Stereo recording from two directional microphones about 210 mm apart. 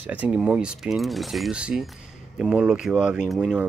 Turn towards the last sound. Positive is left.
turn(degrees=0)  # may be behind; listen again after turning